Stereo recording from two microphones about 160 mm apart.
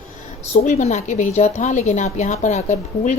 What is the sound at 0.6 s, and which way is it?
A woman's voice, 45° left (ahead or behind).